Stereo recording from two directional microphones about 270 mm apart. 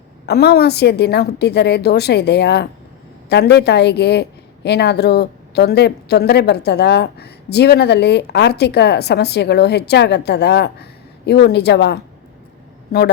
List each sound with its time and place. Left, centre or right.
0.3 s a woman's voice: left